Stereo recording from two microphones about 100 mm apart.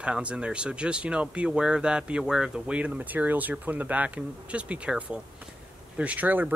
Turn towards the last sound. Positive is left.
turn(degrees=-15)  # may be behind; listen again after turning